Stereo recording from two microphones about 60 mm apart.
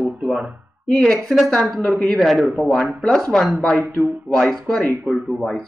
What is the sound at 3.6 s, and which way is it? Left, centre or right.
Speech, centre.